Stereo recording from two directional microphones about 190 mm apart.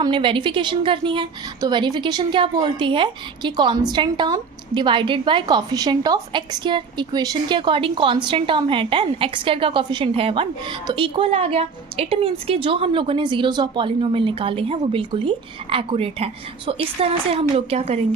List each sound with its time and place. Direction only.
0.0 s a woman's voice: 25° right (ahead or behind)